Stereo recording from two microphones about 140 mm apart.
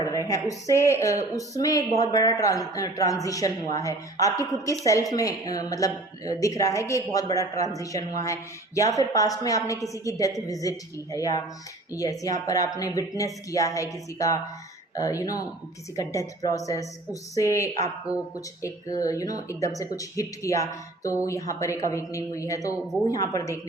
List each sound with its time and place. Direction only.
0.0 s speech: 25° left (ahead or behind)
18.9 s speech: 25° left (ahead or behind)